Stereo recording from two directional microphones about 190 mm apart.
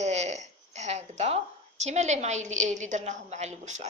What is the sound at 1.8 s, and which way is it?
A woman's voice, 35° right (ahead or behind).